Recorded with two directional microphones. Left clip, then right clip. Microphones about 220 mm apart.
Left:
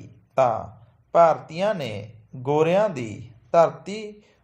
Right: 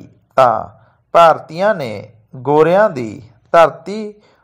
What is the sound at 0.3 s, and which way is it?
A man's voice, 25° right (ahead or behind).